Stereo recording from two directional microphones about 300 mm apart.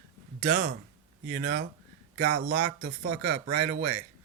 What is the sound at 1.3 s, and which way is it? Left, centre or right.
Speech, right.